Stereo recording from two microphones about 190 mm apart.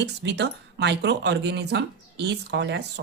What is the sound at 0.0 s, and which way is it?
Speech, 65° right (ahead or behind).